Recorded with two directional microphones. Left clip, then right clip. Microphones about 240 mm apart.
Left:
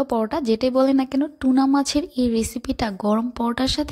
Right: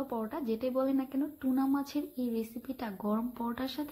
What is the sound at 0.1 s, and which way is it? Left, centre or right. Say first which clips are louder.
Speech: left 14 dB; left.